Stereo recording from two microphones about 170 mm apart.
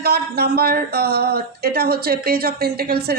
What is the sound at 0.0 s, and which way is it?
Speech, 70° right (ahead or behind).